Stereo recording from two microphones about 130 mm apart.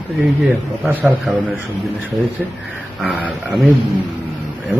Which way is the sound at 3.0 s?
10° right (ahead or behind).